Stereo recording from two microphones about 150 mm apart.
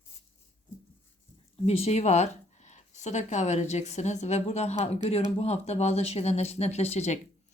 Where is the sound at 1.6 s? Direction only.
45° left (ahead or behind).